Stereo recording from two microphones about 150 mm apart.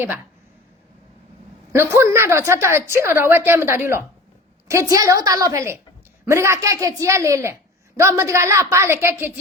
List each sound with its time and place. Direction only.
1.7 s a woman's voice: 15° right (ahead or behind)